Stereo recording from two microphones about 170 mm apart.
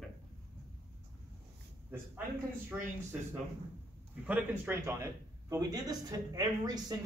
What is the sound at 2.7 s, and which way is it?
Speech, 15° right (ahead or behind).